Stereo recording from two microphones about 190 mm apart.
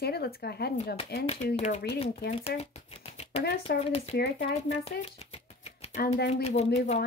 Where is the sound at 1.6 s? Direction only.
35° left (ahead or behind).